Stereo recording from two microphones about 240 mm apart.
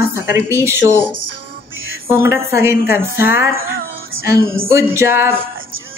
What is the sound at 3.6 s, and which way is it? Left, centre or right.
Music, right.